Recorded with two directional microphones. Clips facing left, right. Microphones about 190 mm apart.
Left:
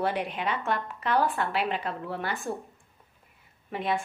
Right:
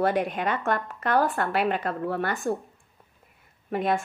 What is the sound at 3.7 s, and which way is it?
Speech, 45° right (ahead or behind).